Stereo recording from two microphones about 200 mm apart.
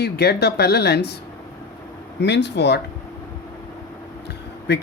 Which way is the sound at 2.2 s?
60° left (ahead or behind).